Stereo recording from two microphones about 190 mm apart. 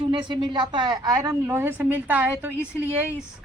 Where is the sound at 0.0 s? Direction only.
25° right (ahead or behind).